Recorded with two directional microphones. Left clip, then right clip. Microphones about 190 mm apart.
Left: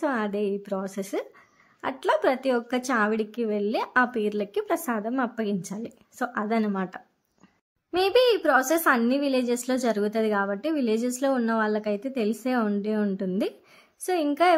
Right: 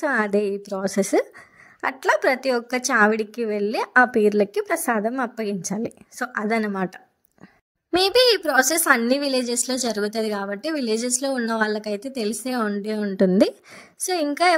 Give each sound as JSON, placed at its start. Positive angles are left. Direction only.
{"t": 0.0, "sound": "a woman's voice", "side_deg": -35}
{"t": 7.9, "sound": "a woman's voice", "side_deg": -45}